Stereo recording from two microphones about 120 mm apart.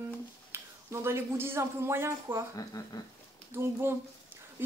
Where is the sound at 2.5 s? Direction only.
30° left (ahead or behind).